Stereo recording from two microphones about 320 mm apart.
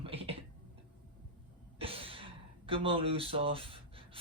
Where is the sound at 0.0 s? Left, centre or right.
Centre.